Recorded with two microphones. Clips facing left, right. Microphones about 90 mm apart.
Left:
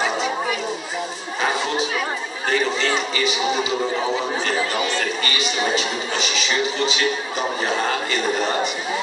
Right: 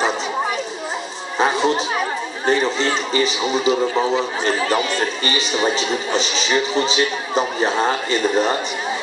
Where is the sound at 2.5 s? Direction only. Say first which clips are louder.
Right 3 dB; 30° right (ahead or behind).